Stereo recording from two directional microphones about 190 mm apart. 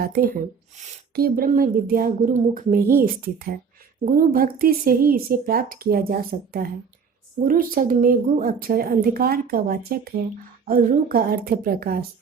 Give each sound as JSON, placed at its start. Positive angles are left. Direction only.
{"t": 0.0, "sound": "speech", "side_deg": -50}